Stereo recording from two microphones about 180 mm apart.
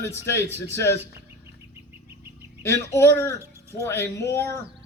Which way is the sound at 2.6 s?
15° left (ahead or behind).